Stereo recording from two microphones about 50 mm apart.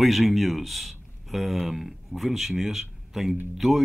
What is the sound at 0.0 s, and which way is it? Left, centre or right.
Speech, centre.